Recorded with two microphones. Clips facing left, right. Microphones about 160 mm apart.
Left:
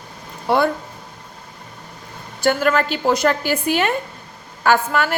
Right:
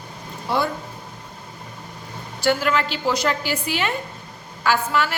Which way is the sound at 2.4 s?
50° left (ahead or behind).